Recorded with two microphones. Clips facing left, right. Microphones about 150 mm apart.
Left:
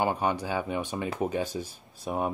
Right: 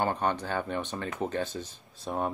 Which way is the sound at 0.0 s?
10° left (ahead or behind).